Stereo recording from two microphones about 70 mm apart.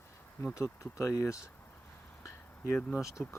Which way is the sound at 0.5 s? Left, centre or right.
Left.